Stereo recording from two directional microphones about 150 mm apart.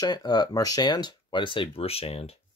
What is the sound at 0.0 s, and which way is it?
Speech, 30° left (ahead or behind).